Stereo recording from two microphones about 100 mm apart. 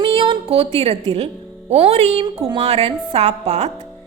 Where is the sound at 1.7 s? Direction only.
75° right (ahead or behind).